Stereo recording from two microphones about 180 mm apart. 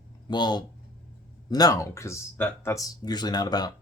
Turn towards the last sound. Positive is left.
turn(degrees=20)  # may be behind; listen again after turning